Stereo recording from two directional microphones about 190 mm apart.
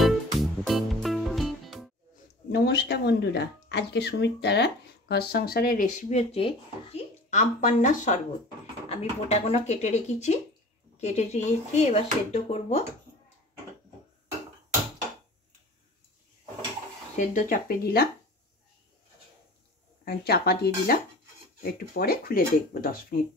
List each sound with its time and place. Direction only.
0.0 s music: centre (ahead or behind)
2.5 s speech: 60° left (ahead or behind); by 12.8 s 35° left (ahead or behind)
17.1 s speech: 45° left (ahead or behind)
20.1 s speech: 55° left (ahead or behind)